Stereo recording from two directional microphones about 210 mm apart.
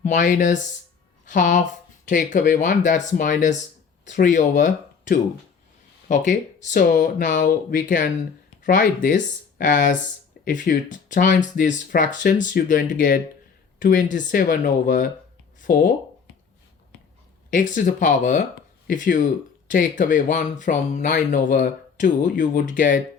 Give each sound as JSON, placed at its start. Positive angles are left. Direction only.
{"t": 0.0, "sound": "speech", "side_deg": 35}
{"t": 17.5, "sound": "speech", "side_deg": 40}